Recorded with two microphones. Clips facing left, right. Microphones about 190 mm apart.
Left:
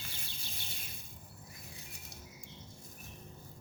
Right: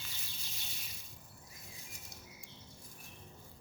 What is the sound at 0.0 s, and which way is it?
Bird, 55° left (ahead or behind).